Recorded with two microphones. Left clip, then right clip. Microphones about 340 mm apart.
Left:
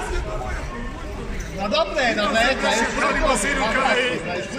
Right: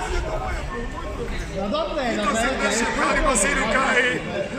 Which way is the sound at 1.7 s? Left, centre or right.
Left.